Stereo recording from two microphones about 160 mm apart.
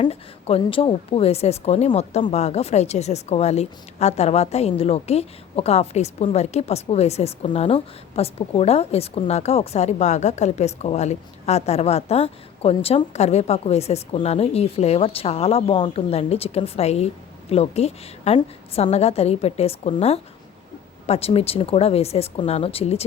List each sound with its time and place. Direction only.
0.0 s a woman's voice: 40° left (ahead or behind)